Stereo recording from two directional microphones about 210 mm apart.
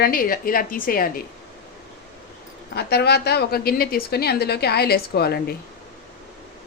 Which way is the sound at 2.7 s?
50° left (ahead or behind).